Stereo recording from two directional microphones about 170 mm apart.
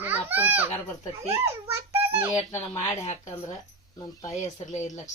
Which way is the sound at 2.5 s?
10° left (ahead or behind).